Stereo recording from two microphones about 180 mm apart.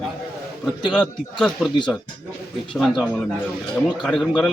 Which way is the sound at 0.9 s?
Centre (ahead or behind).